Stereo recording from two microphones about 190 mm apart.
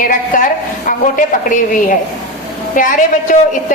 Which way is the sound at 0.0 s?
45° left (ahead or behind).